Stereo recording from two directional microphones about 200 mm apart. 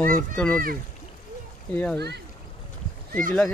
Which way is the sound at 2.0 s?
55° right (ahead or behind).